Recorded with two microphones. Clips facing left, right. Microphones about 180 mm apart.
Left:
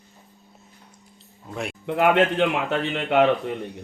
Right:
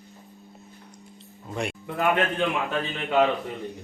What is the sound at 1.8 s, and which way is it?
A man's voice, 75° left (ahead or behind).